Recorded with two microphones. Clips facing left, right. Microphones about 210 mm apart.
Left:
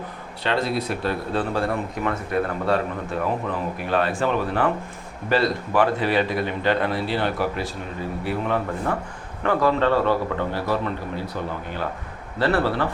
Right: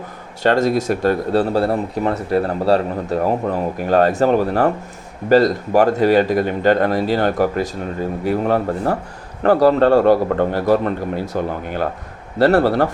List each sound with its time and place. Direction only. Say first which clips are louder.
0.4 s speech: right 8 dB; 45° right (ahead or behind)